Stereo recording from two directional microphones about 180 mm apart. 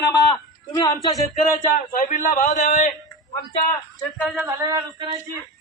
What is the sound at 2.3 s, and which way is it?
Speech, 45° left (ahead or behind).